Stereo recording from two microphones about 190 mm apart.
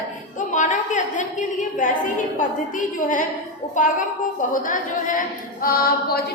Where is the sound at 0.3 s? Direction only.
40° left (ahead or behind).